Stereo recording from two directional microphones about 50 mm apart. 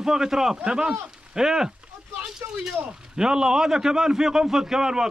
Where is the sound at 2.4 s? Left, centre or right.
Right.